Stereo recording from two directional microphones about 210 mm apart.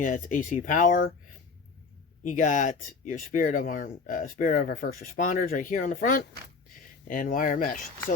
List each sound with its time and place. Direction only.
0.0 s speech: 40° left (ahead or behind)
2.2 s speech: 35° left (ahead or behind)